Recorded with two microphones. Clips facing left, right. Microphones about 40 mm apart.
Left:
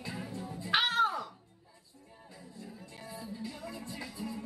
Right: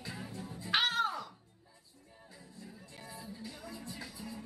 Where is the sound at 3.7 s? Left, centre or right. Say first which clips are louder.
Left 3 dB; left.